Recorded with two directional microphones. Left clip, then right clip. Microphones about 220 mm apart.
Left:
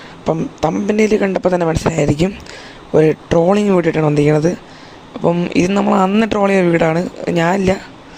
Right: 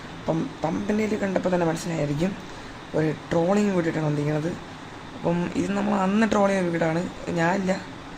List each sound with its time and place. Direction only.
0.3 s speech: 40° left (ahead or behind)
5.2 s speech: 25° left (ahead or behind)